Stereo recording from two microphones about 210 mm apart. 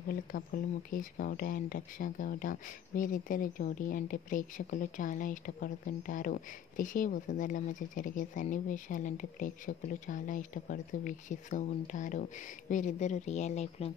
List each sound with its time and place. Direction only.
0.1 s speech: 40° left (ahead or behind)